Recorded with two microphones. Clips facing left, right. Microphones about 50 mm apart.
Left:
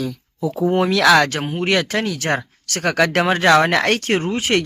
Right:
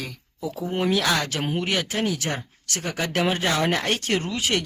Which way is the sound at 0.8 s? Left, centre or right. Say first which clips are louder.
Left 8 dB; left.